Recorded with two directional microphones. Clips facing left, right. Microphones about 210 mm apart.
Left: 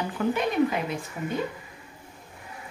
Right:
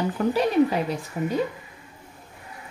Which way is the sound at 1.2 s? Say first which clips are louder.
Right 8 dB; 45° right (ahead or behind).